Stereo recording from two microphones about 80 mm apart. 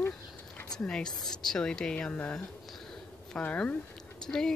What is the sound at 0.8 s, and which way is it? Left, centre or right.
Speech, centre.